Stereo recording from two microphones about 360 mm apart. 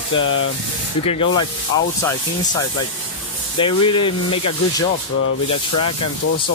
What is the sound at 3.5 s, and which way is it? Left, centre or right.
Speech, centre.